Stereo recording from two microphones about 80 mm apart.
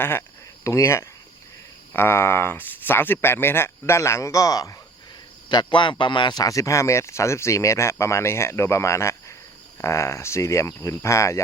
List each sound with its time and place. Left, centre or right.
0.0 s speech: left
5.5 s speech: left
6.4 s speech: left